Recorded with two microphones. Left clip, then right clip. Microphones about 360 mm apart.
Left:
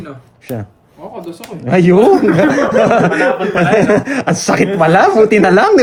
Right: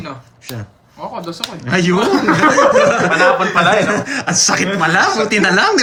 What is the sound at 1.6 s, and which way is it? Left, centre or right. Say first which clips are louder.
Speech: left 6 dB; centre.